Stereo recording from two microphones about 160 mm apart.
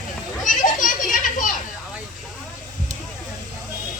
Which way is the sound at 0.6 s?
55° left (ahead or behind).